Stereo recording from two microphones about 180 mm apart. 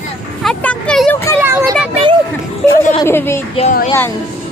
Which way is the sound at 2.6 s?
5° left (ahead or behind).